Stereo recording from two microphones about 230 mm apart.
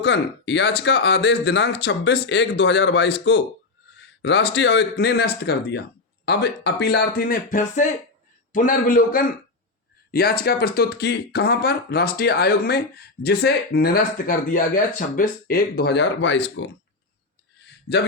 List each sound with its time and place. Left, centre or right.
0.0 s a man's voice: left
17.9 s speech: left